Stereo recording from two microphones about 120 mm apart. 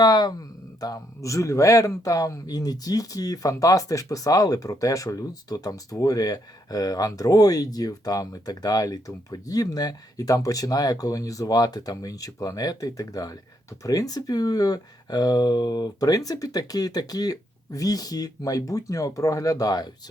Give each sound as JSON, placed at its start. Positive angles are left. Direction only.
{"t": 0.0, "sound": "speech", "side_deg": 35}